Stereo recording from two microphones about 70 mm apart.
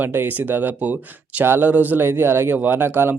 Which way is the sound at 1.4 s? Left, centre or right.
Right.